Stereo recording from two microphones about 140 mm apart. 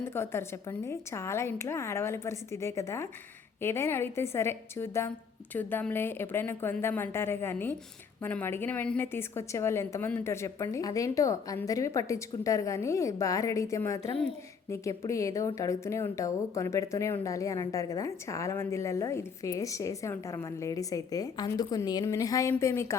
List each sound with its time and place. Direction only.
0.0 s a woman's voice: 15° left (ahead or behind)